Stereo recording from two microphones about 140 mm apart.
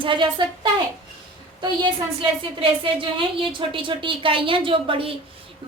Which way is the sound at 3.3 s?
40° right (ahead or behind).